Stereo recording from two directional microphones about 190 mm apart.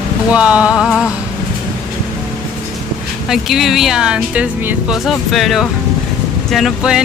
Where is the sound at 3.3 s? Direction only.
Centre (ahead or behind).